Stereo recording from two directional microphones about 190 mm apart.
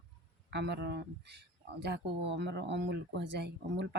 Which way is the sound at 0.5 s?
65° right (ahead or behind).